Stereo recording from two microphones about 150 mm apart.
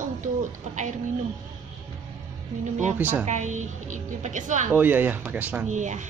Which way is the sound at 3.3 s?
55° right (ahead or behind).